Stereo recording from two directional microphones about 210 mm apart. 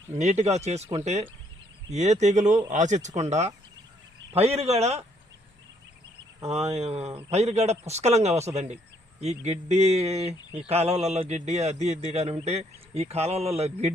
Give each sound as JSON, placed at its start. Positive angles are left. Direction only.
{"t": 0.2, "sound": "speech", "side_deg": -35}
{"t": 6.5, "sound": "a man's voice", "side_deg": -30}